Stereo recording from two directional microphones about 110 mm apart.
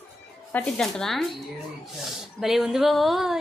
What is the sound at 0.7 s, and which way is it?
Speech, 5° left (ahead or behind).